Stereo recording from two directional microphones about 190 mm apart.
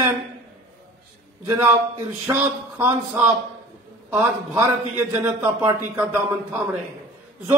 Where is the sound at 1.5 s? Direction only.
15° right (ahead or behind).